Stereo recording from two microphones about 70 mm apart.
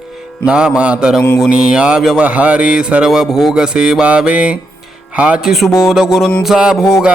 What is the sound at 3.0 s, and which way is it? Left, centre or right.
Music, centre.